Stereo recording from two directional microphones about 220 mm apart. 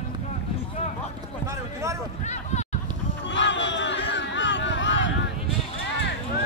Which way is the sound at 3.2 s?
55° left (ahead or behind).